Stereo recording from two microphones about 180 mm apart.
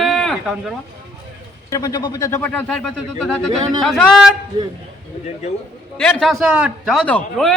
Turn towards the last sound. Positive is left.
turn(degrees=5)  # may be behind; listen again after turning